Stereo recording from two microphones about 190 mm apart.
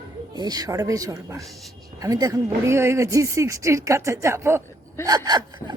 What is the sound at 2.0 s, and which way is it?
Speech, 20° right (ahead or behind).